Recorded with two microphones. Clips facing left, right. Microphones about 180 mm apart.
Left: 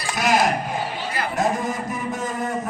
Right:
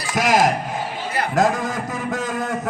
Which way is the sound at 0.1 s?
90° right.